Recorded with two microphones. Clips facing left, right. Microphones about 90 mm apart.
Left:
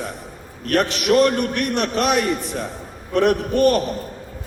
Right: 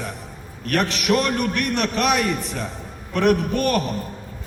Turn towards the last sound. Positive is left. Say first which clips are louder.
# left 4 dB
turn(degrees=35)  # may be behind; listen again after turning